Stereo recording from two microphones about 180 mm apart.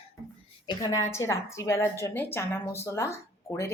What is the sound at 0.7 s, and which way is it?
A woman's voice, 20° left (ahead or behind).